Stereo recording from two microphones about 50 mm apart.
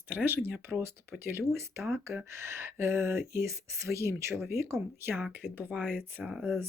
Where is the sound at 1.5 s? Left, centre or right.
Right.